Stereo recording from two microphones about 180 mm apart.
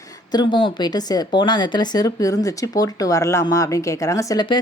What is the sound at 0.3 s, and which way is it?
A woman's voice, 25° left (ahead or behind).